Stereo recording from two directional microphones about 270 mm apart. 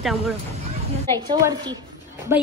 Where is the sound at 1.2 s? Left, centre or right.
Centre.